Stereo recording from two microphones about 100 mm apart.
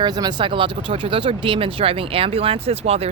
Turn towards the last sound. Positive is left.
turn(degrees=-90)